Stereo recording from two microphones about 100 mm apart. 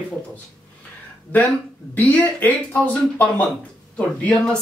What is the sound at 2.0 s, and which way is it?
Speech, 15° left (ahead or behind).